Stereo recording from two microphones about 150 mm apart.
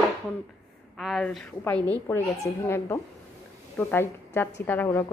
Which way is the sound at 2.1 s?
15° left (ahead or behind).